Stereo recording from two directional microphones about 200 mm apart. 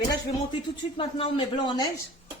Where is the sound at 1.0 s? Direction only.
25° left (ahead or behind).